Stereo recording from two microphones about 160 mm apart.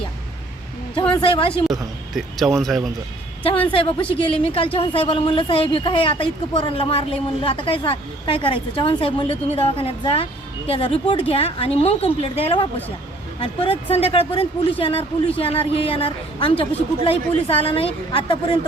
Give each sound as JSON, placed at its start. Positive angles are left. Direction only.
{"t": 1.1, "sound": "speech", "side_deg": 35}
{"t": 1.7, "sound": "speech", "side_deg": 0}
{"t": 3.7, "sound": "speech", "side_deg": 35}